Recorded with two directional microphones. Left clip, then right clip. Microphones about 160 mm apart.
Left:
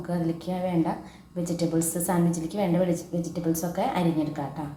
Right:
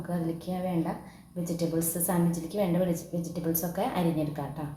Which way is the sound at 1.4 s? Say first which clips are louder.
Left 4 dB; 15° left (ahead or behind).